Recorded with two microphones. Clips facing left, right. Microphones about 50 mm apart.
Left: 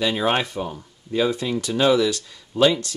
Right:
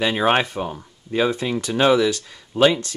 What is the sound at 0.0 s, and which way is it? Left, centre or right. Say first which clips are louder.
Speech: right 3 dB; right.